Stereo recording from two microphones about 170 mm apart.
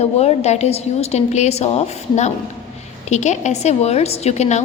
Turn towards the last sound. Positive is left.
turn(degrees=40)  # may be behind; listen again after turning